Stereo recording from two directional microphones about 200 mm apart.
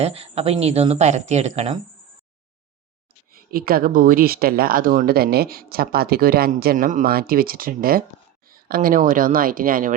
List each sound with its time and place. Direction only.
0.0 s speech: 30° right (ahead or behind)
3.3 s speech: 45° right (ahead or behind)